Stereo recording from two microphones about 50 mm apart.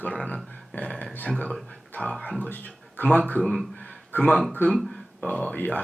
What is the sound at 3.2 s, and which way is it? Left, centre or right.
Speech, left.